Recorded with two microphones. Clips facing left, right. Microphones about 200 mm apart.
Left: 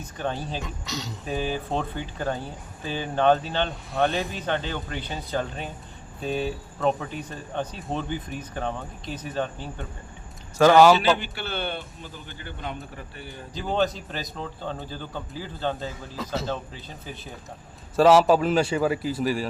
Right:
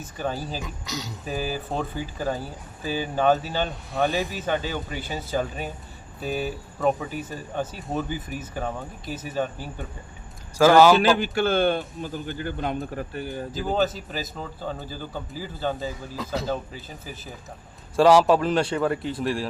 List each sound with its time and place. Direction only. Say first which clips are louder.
0.2 s speech: right 1 dB; 5° right (ahead or behind)
11.2 s speech: right 10 dB; 45° right (ahead or behind)
13.5 s speech: even; 5° right (ahead or behind)